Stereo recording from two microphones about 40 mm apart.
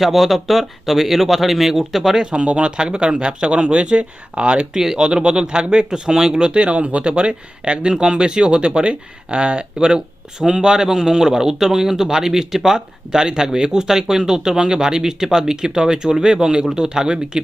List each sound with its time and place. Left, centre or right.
0.0 s speech: centre
2.1 s speech: right
4.7 s speech: centre
6.5 s speech: right; by 12.8 s centre
13.1 s speech: right